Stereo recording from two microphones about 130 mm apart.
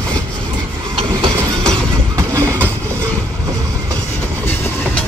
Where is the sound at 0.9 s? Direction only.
40° right (ahead or behind).